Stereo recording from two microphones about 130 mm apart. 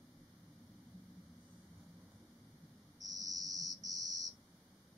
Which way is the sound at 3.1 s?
30° right (ahead or behind).